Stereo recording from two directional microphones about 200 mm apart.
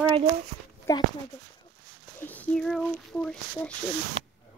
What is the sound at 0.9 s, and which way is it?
Speech, 15° left (ahead or behind).